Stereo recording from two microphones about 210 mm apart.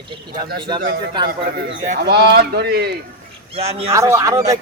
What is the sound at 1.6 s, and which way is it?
Speech, 65° right (ahead or behind).